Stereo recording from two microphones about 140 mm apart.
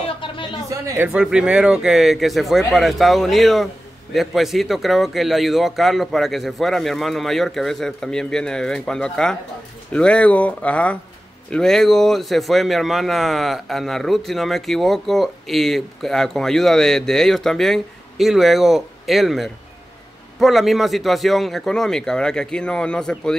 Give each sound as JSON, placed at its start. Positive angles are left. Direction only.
{"t": 0.2, "sound": "a sound", "side_deg": 35}
{"t": 0.7, "sound": "speech", "side_deg": -25}
{"t": 1.0, "sound": "a man's voice", "side_deg": -5}